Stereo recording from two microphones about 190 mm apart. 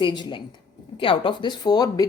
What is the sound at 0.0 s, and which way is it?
Speech, 25° left (ahead or behind).